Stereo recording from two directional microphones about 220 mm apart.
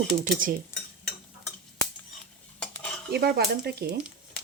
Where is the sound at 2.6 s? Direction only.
5° left (ahead or behind).